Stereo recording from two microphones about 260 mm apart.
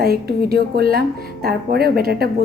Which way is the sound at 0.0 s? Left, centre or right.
Right.